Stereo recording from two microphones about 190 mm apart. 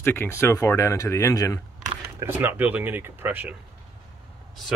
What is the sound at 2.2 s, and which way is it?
Speech, 15° right (ahead or behind).